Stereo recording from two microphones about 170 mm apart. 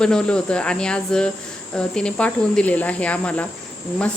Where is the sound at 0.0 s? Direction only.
5° left (ahead or behind).